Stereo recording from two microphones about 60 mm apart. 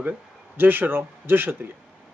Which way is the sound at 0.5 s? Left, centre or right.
Right.